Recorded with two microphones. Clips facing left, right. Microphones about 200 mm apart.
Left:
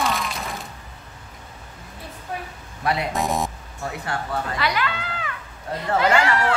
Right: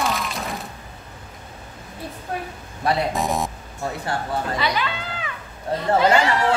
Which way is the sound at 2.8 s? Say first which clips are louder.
Right 3 dB; 35° right (ahead or behind).